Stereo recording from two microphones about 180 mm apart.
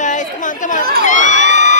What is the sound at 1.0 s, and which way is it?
Crowd, 45° left (ahead or behind).